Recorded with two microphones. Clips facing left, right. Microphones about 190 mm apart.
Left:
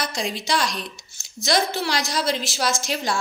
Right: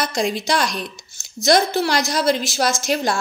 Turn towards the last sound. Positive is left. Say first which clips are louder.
# right 4 dB
turn(degrees=-45)  # may be behind; listen again after turning